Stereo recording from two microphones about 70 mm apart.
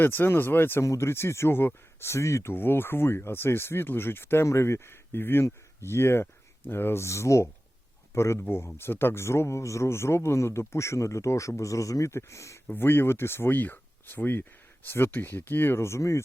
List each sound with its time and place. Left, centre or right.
0.0 s speech: left
12.6 s speech: left